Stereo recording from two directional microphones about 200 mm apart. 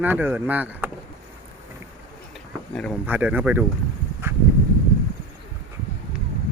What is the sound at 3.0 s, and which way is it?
Speech, 10° right (ahead or behind).